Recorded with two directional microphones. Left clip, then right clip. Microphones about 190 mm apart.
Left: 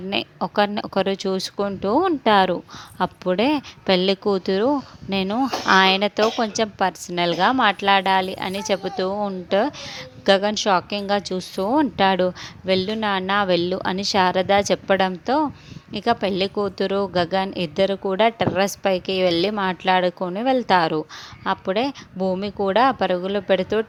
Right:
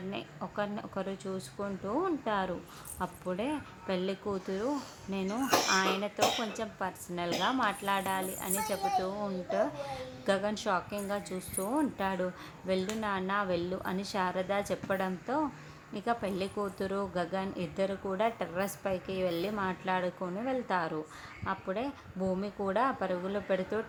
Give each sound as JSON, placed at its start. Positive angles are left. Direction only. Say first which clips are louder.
{"t": 0.1, "sound": "speech", "louder": "left 19 dB", "side_deg": 50}